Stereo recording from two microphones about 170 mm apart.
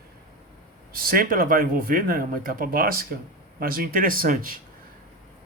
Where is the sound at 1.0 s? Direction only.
60° right (ahead or behind).